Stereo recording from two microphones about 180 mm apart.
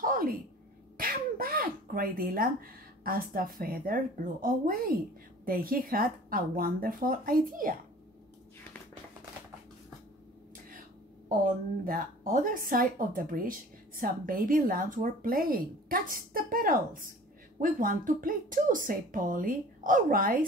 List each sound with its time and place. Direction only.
0.0 s a sound: 50° right (ahead or behind)
0.9 s a woman's voice: 55° right (ahead or behind)
11.2 s a woman's voice: 50° right (ahead or behind)